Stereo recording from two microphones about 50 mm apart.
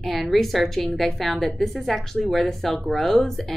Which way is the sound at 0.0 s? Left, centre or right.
Centre.